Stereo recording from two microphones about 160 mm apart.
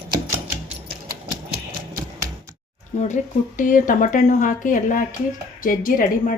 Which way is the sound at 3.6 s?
55° left (ahead or behind).